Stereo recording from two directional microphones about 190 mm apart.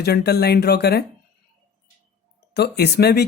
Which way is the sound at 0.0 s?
55° left (ahead or behind).